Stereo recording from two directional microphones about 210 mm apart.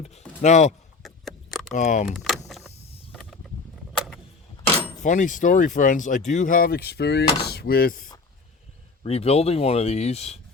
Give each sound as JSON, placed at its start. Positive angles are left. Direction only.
{"t": 0.0, "sound": "a sound", "side_deg": 30}
{"t": 1.0, "sound": "a sound", "side_deg": 0}
{"t": 1.7, "sound": "speech", "side_deg": 35}
{"t": 2.0, "sound": "speech", "side_deg": 0}
{"t": 3.1, "sound": "mechanisms", "side_deg": 0}
{"t": 5.0, "sound": "speech", "side_deg": 35}
{"t": 9.0, "sound": "speech", "side_deg": 30}